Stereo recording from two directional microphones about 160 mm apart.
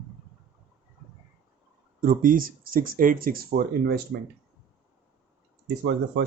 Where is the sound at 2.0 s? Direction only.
60° right (ahead or behind).